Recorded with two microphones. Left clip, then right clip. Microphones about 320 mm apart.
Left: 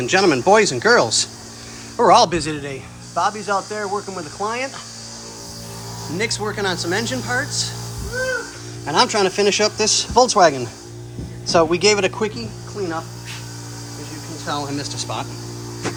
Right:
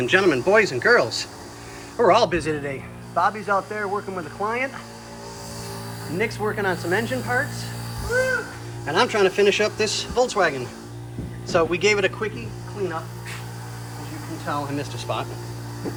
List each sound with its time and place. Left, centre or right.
0.0 s speech: centre
6.1 s speech: centre
8.9 s speech: centre
14.4 s speech: centre